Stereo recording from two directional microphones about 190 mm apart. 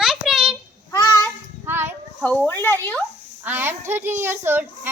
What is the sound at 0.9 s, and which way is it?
Speech, 20° left (ahead or behind).